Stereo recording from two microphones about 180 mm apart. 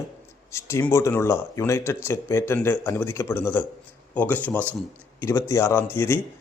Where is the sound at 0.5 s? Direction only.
15° left (ahead or behind).